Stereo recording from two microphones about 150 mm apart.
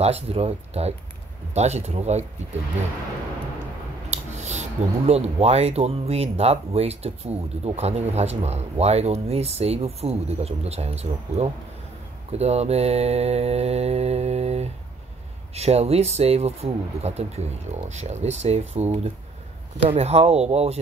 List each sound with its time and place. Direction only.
0.0 s speech: 45° right (ahead or behind)
4.1 s speech: 50° right (ahead or behind)